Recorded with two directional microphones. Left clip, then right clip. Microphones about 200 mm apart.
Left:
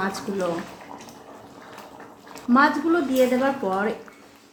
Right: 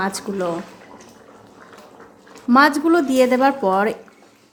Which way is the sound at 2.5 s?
35° right (ahead or behind).